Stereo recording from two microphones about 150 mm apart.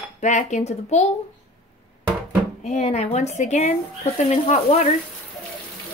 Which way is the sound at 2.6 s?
50° left (ahead or behind).